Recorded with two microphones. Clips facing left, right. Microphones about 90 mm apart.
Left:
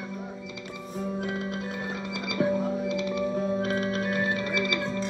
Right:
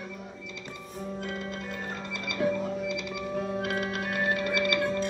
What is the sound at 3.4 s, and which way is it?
Music, 20° left (ahead or behind).